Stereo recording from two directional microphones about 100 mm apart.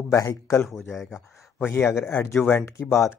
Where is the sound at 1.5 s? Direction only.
20° left (ahead or behind).